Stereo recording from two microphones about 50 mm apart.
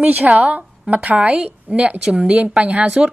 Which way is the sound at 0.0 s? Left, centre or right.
Right.